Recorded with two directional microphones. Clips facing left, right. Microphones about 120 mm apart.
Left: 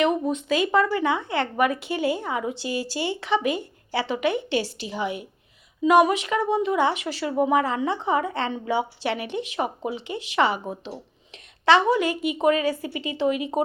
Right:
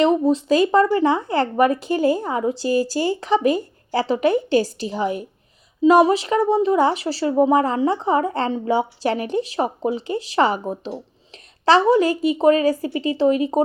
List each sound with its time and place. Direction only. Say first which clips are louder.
0.0 s speech: right 6 dB; 30° right (ahead or behind)